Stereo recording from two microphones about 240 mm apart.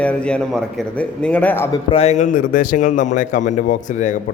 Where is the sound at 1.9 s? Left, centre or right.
Left.